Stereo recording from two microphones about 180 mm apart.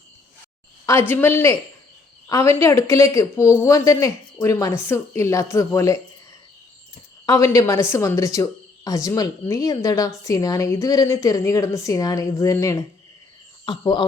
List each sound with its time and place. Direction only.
0.9 s a woman's voice: 15° left (ahead or behind)
7.3 s a woman's voice: 15° left (ahead or behind)